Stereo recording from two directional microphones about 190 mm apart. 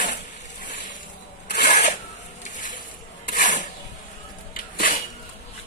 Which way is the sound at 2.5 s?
45° left (ahead or behind).